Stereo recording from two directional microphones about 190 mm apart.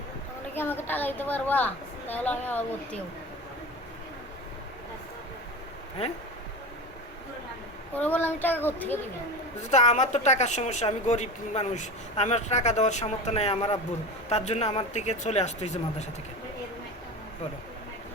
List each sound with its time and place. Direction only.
0.5 s a woman's voice: 10° left (ahead or behind)
7.9 s a woman's voice: 10° left (ahead or behind)
9.6 s a woman's voice: 40° left (ahead or behind)